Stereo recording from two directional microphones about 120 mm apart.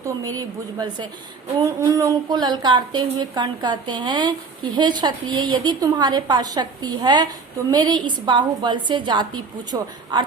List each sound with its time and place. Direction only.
0.3 s a woman's voice: 35° right (ahead or behind)